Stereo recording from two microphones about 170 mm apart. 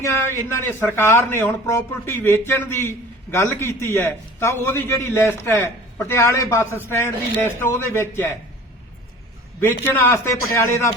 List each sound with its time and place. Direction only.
0.0 s a man's voice: 15° left (ahead or behind)
9.8 s a man's voice: 15° left (ahead or behind)